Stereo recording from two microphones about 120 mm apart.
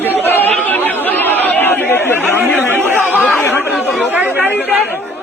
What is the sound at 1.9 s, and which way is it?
Speech, 15° left (ahead or behind).